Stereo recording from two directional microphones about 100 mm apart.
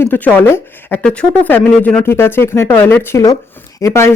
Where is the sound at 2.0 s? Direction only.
20° left (ahead or behind).